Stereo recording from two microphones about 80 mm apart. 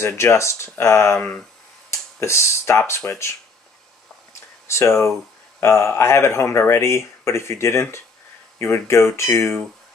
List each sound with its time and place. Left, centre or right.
0.0 s speech: left
4.3 s a sound: left
5.6 s speech: left